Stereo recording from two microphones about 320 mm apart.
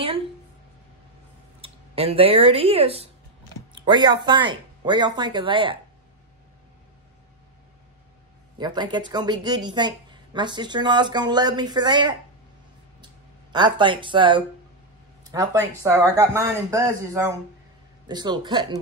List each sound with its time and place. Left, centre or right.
1.6 s speech: centre
8.5 s speech: centre
15.8 s speech: centre